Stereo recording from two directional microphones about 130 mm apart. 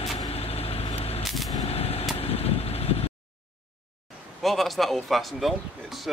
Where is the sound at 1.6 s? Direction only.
50° left (ahead or behind).